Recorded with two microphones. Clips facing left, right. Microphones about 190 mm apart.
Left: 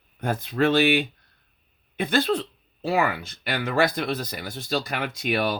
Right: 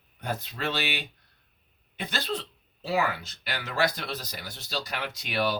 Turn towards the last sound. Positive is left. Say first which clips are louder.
# left 4 dB
turn(degrees=55)  # may be behind; listen again after turning